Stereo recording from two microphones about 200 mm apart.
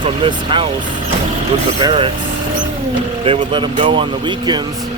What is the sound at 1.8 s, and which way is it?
Speech, 25° right (ahead or behind).